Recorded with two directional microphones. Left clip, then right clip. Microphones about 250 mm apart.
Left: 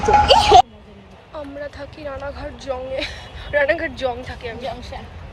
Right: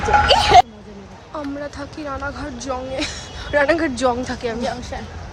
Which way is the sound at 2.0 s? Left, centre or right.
Centre.